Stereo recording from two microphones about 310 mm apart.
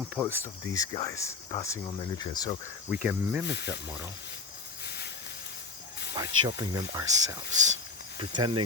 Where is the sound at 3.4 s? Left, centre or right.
Left.